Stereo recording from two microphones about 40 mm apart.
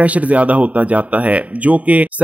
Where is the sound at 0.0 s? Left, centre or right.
Right.